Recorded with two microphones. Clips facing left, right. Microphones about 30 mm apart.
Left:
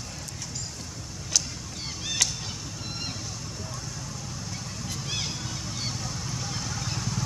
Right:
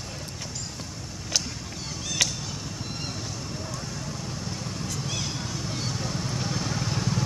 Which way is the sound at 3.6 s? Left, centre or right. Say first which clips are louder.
Right 3 dB; right.